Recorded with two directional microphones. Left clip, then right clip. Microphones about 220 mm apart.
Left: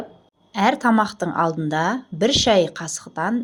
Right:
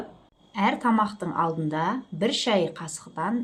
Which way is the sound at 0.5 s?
30° left (ahead or behind).